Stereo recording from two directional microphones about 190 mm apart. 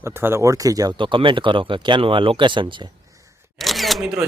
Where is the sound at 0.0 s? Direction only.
10° right (ahead or behind).